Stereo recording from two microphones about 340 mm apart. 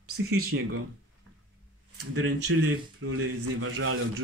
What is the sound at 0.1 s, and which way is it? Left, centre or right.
Speech, right.